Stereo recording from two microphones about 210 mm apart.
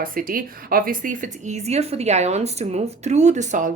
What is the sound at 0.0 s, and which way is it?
Speech, 40° right (ahead or behind).